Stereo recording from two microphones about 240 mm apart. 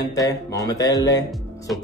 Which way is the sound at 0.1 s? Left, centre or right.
Centre.